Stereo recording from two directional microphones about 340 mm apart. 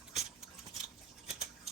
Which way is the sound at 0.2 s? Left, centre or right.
Centre.